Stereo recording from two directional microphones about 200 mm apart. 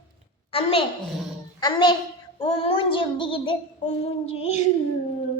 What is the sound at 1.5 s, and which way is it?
Speech, 20° left (ahead or behind).